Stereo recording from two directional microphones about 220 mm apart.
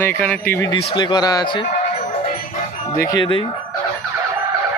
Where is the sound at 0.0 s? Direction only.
10° left (ahead or behind).